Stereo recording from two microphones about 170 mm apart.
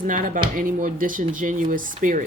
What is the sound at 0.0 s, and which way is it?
Speech, 55° right (ahead or behind).